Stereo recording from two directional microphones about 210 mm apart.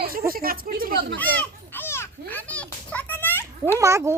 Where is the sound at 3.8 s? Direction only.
15° right (ahead or behind).